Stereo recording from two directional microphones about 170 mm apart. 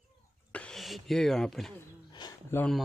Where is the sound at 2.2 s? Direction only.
25° left (ahead or behind).